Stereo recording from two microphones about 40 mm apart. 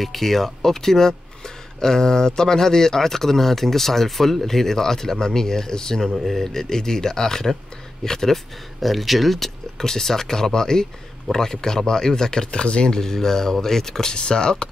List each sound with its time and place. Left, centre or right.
0.0 s speech: centre
8.8 s speech: centre; by 13.0 s left
13.0 s speech: centre